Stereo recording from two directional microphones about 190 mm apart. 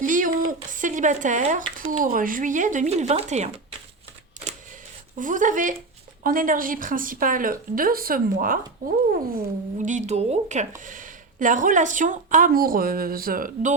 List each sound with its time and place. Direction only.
0.0 s a sound: 45° right (ahead or behind)
0.7 s speech: 40° right (ahead or behind)
5.1 s speech: 45° right (ahead or behind)